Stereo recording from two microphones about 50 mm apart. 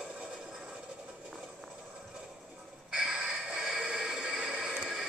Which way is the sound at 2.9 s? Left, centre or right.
Centre.